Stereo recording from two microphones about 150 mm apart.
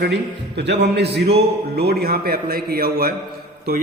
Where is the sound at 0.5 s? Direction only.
90° right.